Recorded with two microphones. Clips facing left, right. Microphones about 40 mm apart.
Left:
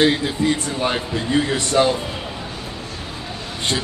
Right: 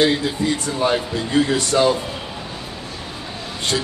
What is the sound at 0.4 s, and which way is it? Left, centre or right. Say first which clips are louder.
Speech: left 4 dB; left.